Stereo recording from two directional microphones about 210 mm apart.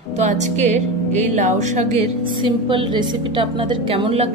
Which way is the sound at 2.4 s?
25° right (ahead or behind).